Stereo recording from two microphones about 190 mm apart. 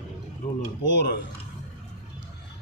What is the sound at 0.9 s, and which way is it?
Speech, 65° left (ahead or behind).